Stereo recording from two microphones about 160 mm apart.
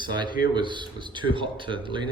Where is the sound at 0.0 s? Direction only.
30° right (ahead or behind).